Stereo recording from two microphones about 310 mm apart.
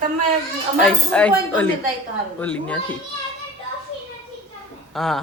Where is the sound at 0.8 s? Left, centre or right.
Centre.